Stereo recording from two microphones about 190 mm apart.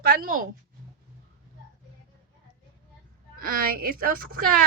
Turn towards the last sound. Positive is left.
turn(degrees=-50)  # may be behind; listen again after turning